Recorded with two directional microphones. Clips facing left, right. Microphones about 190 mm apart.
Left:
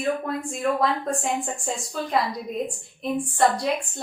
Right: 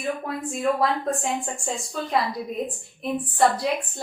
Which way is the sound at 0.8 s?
Centre (ahead or behind).